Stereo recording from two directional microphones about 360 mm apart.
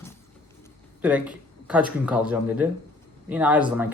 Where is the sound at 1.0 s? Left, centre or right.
Centre.